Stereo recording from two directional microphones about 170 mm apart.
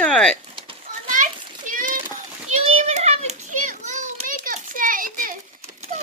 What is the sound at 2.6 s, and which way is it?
Children playing, 40° right (ahead or behind).